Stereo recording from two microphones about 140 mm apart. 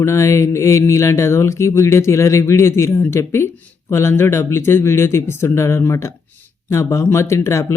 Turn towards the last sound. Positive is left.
turn(degrees=20)  # may be behind; listen again after turning